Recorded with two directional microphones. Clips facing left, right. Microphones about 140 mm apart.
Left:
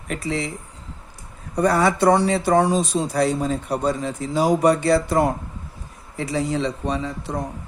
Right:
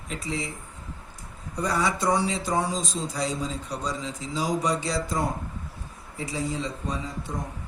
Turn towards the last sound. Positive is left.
turn(degrees=75)  # may be behind; listen again after turning